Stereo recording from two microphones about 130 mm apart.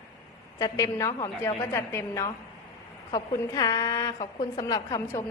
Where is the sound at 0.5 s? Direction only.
25° left (ahead or behind).